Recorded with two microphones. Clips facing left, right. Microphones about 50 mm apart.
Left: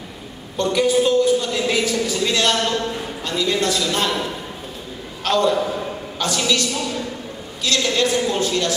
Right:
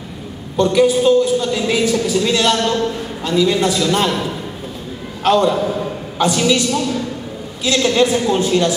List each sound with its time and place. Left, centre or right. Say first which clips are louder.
0.6 s a woman's voice: right 4 dB; centre
5.2 s a man's voice: right 4 dB; centre
5.6 s a woman's voice: right 3 dB; centre
6.1 s a woman's voice: right 6 dB; centre
7.6 s a woman's voice: right 5 dB; centre